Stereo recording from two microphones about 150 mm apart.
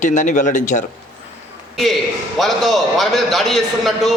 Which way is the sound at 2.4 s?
Centre (ahead or behind).